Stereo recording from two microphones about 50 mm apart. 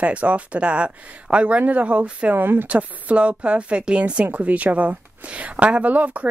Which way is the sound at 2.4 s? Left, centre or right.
Right.